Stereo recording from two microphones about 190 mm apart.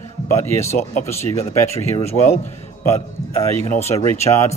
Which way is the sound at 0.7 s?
40° left (ahead or behind).